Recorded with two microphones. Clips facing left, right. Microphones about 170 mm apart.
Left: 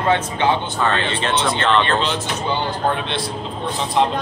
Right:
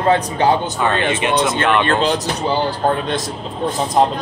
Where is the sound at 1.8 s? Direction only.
40° right (ahead or behind).